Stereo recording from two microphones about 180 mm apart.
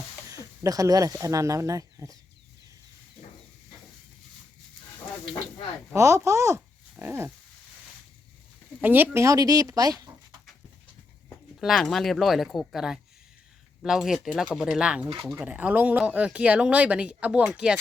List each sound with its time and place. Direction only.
0.3 s speech: 15° right (ahead or behind)
5.9 s speech: 15° right (ahead or behind)
8.8 s speech: 10° right (ahead or behind)
11.6 s speech: centre (ahead or behind)